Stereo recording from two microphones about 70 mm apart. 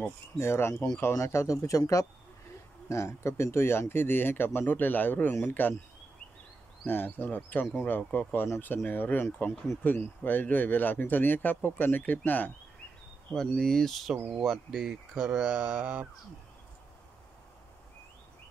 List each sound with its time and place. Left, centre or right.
0.4 s speech: left
6.9 s speech: left
13.3 s speech: centre; by 16.1 s right